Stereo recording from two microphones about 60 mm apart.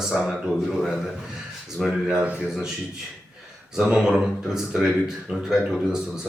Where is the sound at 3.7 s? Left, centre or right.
Centre.